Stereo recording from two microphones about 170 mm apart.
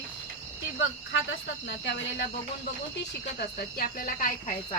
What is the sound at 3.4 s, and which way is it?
Speech, 55° left (ahead or behind).